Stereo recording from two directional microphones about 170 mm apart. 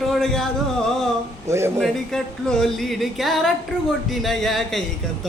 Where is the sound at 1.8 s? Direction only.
5° left (ahead or behind).